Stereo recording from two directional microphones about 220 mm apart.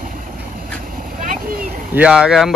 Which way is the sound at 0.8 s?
40° right (ahead or behind).